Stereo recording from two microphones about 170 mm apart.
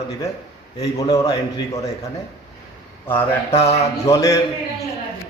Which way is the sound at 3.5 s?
35° left (ahead or behind).